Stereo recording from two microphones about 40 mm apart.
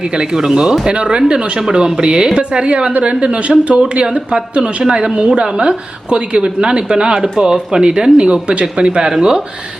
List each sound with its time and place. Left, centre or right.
0.1 s a woman's voice: right